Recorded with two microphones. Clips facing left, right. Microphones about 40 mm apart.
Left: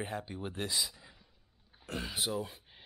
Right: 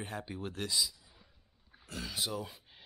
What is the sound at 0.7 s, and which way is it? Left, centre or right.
Speech, left.